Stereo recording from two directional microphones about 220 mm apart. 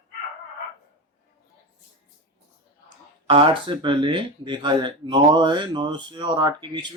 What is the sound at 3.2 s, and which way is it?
Speech, 25° right (ahead or behind).